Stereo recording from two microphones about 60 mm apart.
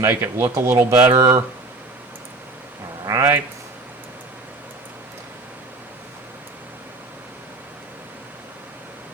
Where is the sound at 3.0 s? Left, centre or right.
Right.